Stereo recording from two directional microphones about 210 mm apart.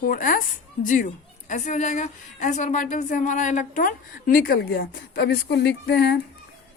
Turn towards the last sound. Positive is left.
turn(degrees=55)  # may be behind; listen again after turning